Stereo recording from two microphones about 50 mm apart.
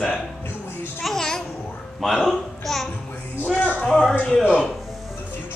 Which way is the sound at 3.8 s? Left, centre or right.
Centre.